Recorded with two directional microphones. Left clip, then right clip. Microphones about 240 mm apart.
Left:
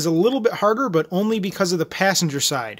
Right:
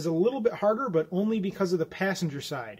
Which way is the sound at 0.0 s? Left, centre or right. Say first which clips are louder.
Left 7 dB; left.